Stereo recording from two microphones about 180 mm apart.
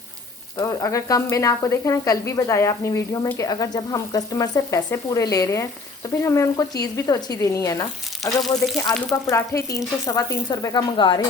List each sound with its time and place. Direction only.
0.6 s sizzle: 20° left (ahead or behind)
6.9 s speech: 20° left (ahead or behind)